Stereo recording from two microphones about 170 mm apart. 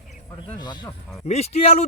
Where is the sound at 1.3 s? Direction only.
40° left (ahead or behind).